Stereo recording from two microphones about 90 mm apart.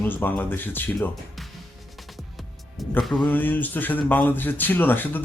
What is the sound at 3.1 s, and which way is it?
Speech, 20° left (ahead or behind).